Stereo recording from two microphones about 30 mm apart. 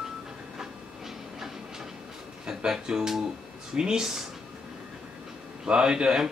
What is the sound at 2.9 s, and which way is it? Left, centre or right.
A man's voice, centre.